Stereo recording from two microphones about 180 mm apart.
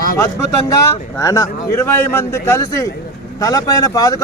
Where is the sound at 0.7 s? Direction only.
20° left (ahead or behind).